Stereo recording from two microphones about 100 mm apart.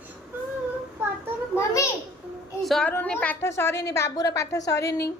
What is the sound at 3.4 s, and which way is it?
A woman's voice, 25° left (ahead or behind).